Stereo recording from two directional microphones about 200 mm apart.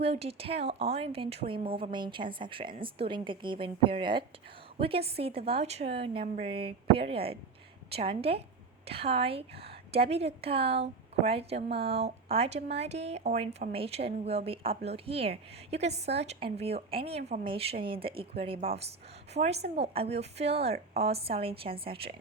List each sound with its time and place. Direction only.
0.0 s a woman's voice: 30° right (ahead or behind)